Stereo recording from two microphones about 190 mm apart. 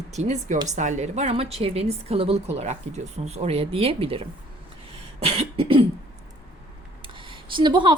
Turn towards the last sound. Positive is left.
turn(degrees=-25)  # may be behind; listen again after turning